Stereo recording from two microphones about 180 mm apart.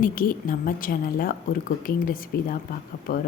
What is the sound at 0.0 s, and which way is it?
Speech, 50° left (ahead or behind).